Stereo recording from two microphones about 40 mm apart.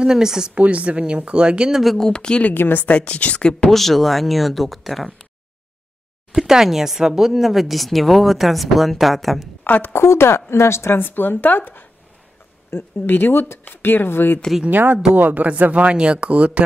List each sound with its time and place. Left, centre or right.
0.0 s speech: centre
0.6 s speech: right
1.7 s speech: centre
2.1 s speech: left
2.5 s speech: left
2.9 s speech: left
3.3 s speech: left
3.7 s speech: centre
6.3 s speech: centre
9.7 s a woman's voice: left
9.9 s a woman's voice: left
13.7 s speech: left
14.7 s speech: right